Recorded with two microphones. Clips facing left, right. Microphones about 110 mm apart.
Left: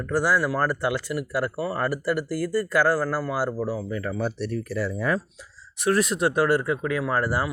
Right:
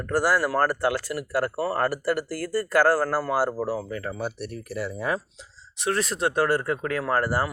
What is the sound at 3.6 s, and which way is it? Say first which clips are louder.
Speech: even; 70° right (ahead or behind).